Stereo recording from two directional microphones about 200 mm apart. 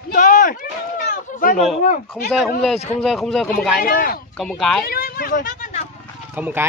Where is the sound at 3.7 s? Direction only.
45° left (ahead or behind).